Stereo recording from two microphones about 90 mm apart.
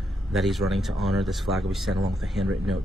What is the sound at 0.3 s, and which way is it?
Speech, centre (ahead or behind).